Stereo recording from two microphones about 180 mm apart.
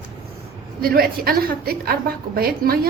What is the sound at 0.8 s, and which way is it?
A woman's voice, 55° right (ahead or behind).